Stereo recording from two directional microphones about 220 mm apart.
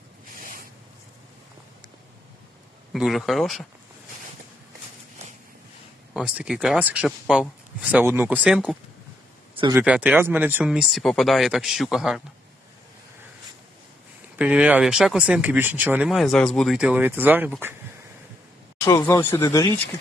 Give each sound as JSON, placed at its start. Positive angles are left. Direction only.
{"t": 2.9, "sound": "speech", "side_deg": 0}
{"t": 6.1, "sound": "speech", "side_deg": -5}
{"t": 9.6, "sound": "speech", "side_deg": -20}
{"t": 9.8, "sound": "speech", "side_deg": -5}
{"t": 14.3, "sound": "speech", "side_deg": -5}
{"t": 18.9, "sound": "speech", "side_deg": 15}